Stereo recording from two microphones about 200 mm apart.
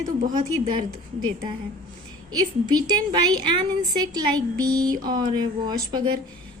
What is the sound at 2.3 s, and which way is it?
Speech, 20° right (ahead or behind).